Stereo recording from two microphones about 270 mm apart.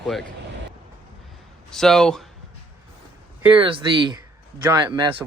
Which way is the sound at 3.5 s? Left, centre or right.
Centre.